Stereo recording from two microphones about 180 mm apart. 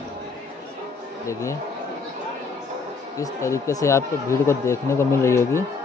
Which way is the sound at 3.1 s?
15° left (ahead or behind).